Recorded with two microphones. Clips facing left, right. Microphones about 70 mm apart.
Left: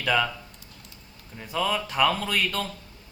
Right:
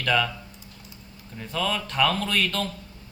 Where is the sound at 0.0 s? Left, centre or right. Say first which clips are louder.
Even; centre.